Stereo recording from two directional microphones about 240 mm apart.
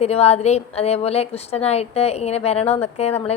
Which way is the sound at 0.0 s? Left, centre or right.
Left.